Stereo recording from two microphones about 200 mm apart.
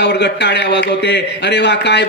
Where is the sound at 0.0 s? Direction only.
55° left (ahead or behind).